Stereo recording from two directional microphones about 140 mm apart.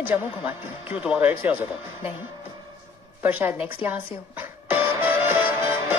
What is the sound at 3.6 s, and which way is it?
Music, 15° right (ahead or behind).